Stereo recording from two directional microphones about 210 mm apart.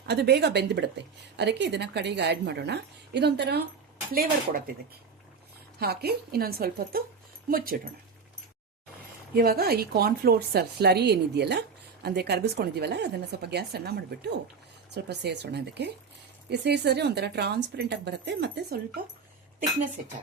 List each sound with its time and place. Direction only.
0.1 s a woman's voice: 50° right (ahead or behind)
5.8 s a woman's voice: 50° right (ahead or behind)
9.3 s a woman's voice: 45° right (ahead or behind)